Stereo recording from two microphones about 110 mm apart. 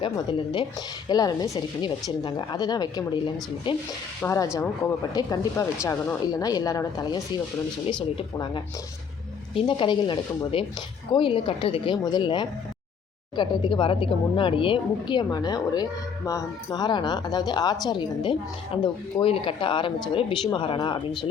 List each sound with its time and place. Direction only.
0.0 s speech: 50° left (ahead or behind)
1.0 s speech: 40° left (ahead or behind)
4.2 s speech: 15° left (ahead or behind)
5.1 s speech: 30° left (ahead or behind)
9.6 s speech: 50° left (ahead or behind)